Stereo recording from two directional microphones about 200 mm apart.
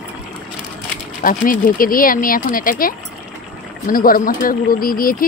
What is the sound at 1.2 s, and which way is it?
Speech, 45° left (ahead or behind).